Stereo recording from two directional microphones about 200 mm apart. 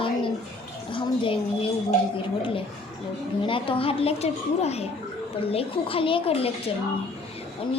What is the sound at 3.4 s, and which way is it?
A child's voice, 25° left (ahead or behind).